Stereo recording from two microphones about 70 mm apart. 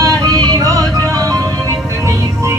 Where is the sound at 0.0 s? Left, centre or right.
Right.